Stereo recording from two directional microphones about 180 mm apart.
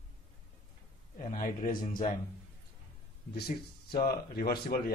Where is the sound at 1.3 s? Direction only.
50° left (ahead or behind).